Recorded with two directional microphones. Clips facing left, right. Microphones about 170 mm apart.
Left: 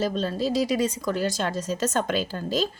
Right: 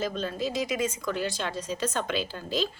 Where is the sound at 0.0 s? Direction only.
35° left (ahead or behind).